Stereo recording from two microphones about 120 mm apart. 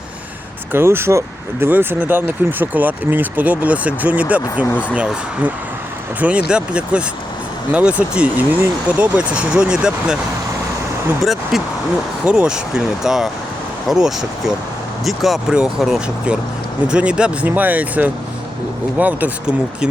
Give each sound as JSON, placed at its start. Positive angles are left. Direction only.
{"t": 0.7, "sound": "speech", "side_deg": -20}
{"t": 11.2, "sound": "vehicle", "side_deg": 0}
{"t": 12.2, "sound": "speech", "side_deg": -10}